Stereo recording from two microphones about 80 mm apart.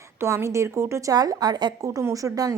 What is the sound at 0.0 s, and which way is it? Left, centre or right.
A woman's voice, right.